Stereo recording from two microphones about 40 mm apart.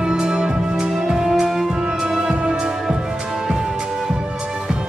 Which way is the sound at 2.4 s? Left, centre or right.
Right.